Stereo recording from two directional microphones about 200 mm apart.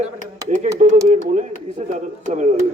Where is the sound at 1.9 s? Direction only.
35° right (ahead or behind).